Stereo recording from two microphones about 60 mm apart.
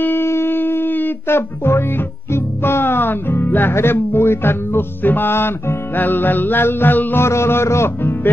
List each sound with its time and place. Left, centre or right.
0.0 s music: left
7.2 s a man's voice: left